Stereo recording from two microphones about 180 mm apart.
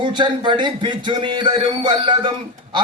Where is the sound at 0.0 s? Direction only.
25° right (ahead or behind).